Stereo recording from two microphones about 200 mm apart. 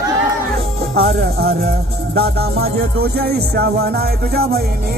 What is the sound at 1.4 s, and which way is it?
Music, 50° right (ahead or behind).